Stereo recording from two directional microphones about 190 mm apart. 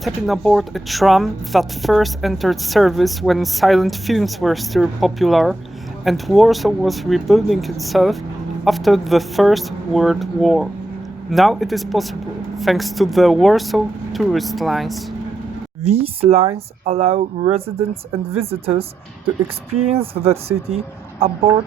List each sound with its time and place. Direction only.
0.0 s speech: centre (ahead or behind)
15.8 s speech: 35° right (ahead or behind)